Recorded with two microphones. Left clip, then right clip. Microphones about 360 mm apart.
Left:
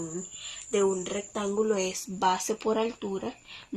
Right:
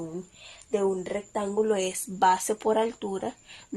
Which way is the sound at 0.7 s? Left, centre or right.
Right.